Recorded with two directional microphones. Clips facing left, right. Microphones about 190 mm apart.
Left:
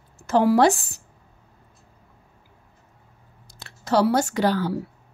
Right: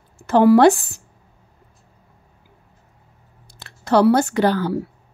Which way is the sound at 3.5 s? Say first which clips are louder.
Right 4 dB; 60° right (ahead or behind).